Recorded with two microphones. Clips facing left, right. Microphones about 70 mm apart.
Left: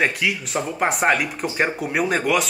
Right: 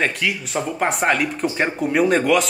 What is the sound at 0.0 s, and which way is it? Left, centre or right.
Speech, centre.